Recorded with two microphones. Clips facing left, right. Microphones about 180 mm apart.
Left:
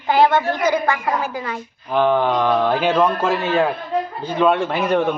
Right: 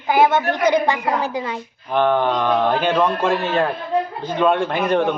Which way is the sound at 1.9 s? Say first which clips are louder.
Left 1 dB; 10° left (ahead or behind).